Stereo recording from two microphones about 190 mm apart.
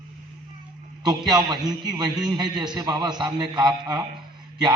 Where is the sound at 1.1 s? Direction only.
20° right (ahead or behind).